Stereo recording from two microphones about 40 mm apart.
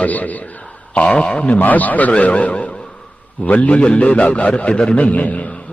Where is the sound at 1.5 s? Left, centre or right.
Left.